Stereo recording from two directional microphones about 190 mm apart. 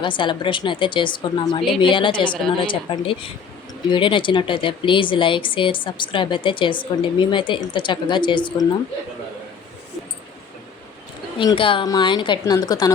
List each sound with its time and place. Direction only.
0.0 s speech: 25° left (ahead or behind)
11.3 s speech: 25° left (ahead or behind)